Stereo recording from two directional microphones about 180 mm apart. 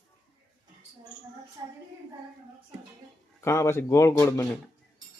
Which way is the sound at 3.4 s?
15° left (ahead or behind).